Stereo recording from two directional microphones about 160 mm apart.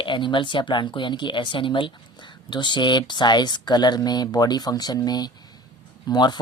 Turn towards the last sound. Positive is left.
turn(degrees=25)  # may be behind; listen again after turning